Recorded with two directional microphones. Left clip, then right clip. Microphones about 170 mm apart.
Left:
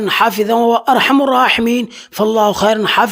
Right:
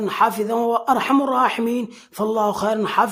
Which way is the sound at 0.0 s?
25° left (ahead or behind).